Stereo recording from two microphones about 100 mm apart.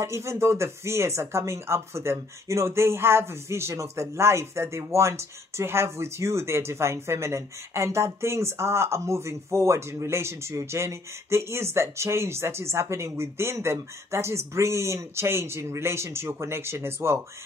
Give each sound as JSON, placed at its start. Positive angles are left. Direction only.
{"t": 0.0, "sound": "speech", "side_deg": -30}